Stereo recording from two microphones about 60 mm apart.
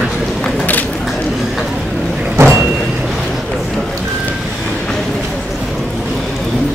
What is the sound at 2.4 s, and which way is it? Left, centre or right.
Vehicle, right.